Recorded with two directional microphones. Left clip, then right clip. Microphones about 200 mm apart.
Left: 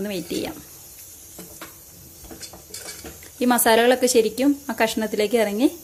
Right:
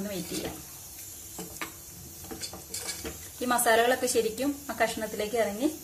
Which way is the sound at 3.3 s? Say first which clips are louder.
Left 6 dB; 45° left (ahead or behind).